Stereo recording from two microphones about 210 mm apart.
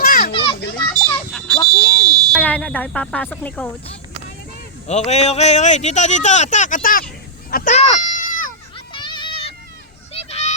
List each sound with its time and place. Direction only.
0.0 s children playing: 45° left (ahead or behind)
0.9 s children playing: 10° left (ahead or behind)
1.7 s fire alarm: 15° right (ahead or behind)
2.3 s speech: 5° left (ahead or behind)
4.9 s speech: 30° left (ahead or behind)
8.1 s goat: 40° left (ahead or behind)
8.9 s a sound: 20° left (ahead or behind)
10.1 s goose: 30° left (ahead or behind)